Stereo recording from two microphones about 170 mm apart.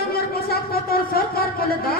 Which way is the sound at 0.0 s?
65° left (ahead or behind).